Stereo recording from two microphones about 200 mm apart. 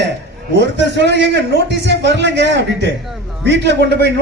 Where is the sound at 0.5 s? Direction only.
60° right (ahead or behind).